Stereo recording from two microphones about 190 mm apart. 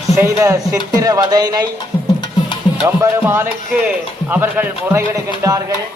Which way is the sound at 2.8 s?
15° right (ahead or behind).